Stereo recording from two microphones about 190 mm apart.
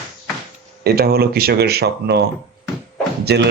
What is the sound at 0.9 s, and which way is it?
Speech, 55° right (ahead or behind).